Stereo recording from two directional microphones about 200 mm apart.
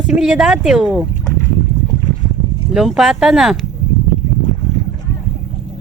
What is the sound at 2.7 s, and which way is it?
Speech, centre (ahead or behind).